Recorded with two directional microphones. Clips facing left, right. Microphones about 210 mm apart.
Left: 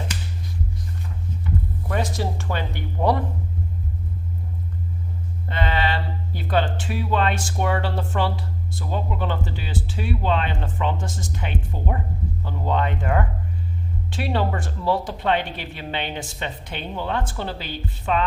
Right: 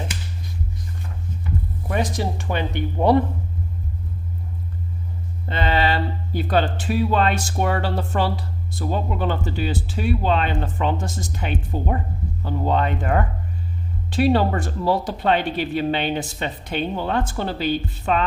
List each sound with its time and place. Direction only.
1.9 s speech: 15° right (ahead or behind)
5.5 s speech: 30° right (ahead or behind)